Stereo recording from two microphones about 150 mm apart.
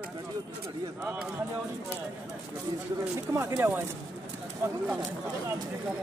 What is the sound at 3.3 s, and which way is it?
Speech, 20° right (ahead or behind).